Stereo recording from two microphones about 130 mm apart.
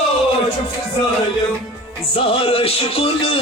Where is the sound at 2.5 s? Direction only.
50° left (ahead or behind).